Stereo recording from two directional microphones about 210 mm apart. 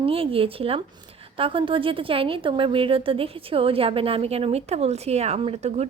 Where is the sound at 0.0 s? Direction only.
25° right (ahead or behind).